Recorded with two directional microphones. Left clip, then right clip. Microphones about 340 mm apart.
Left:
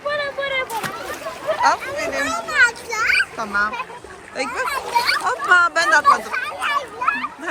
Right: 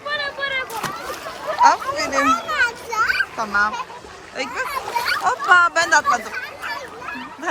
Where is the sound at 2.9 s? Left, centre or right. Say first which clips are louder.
Left 1 dB; centre.